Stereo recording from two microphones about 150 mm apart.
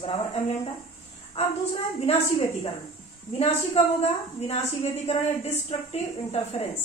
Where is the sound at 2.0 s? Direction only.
45° left (ahead or behind).